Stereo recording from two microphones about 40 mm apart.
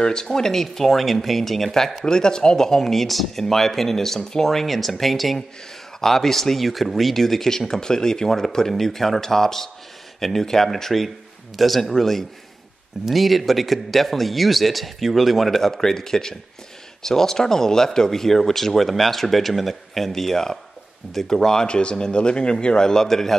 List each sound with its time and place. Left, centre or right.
0.0 s a man's voice: centre